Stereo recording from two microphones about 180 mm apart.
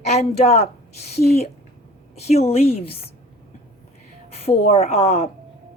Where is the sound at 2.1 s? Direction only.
35° left (ahead or behind).